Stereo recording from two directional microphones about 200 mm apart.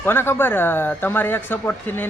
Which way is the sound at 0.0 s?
10° left (ahead or behind).